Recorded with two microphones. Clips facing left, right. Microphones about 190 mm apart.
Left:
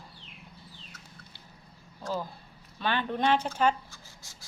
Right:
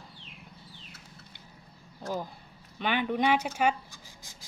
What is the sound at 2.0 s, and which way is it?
Speech, 15° right (ahead or behind).